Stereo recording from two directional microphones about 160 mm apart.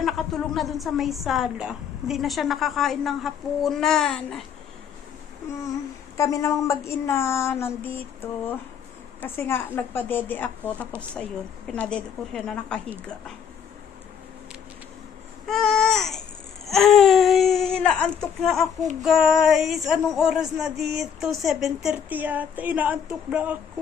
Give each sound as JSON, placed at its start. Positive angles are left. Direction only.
{"t": 0.0, "sound": "female singing", "side_deg": 0}
{"t": 6.1, "sound": "a sound", "side_deg": 20}
{"t": 11.7, "sound": "female singing", "side_deg": 5}
{"t": 15.4, "sound": "babbling", "side_deg": 0}
{"t": 16.6, "sound": "speech", "side_deg": 0}
{"t": 19.0, "sound": "female singing", "side_deg": 0}